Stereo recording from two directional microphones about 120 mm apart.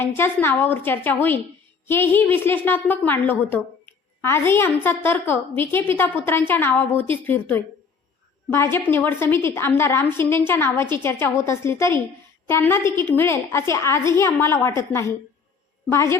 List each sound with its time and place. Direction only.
0.0 s a woman's voice: 20° left (ahead or behind)